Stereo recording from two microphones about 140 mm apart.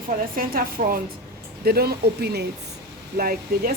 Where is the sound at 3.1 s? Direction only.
90° right.